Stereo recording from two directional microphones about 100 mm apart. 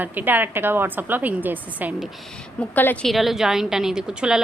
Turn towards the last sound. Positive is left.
turn(degrees=-10)  # may be behind; listen again after turning